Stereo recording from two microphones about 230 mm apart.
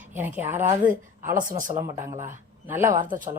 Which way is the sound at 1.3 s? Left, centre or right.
Right.